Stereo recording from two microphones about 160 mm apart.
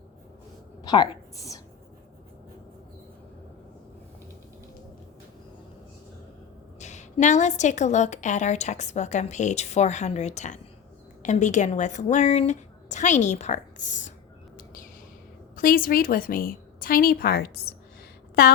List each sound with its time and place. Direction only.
0.8 s a sound: 30° left (ahead or behind)
6.7 s a woman's voice: 45° left (ahead or behind)
15.5 s a woman's voice: 60° left (ahead or behind); by 17.7 s 85° left